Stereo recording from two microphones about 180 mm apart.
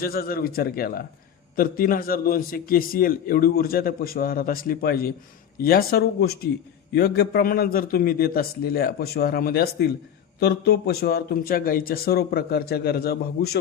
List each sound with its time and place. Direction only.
0.0 s a man's voice: 55° left (ahead or behind)